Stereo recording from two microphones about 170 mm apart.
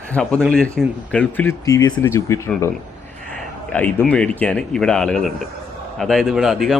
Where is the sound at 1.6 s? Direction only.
20° left (ahead or behind).